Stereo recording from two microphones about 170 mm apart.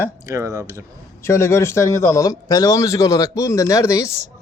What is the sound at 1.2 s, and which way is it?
A man's voice, 15° left (ahead or behind).